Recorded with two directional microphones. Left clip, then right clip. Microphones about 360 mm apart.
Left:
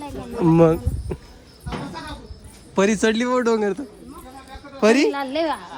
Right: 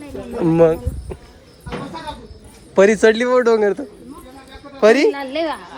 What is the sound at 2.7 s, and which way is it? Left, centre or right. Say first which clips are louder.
A woman's voice: right 7 dB; centre.